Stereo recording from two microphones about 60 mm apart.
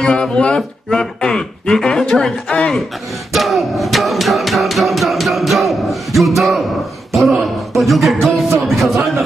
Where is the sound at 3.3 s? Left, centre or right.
Centre.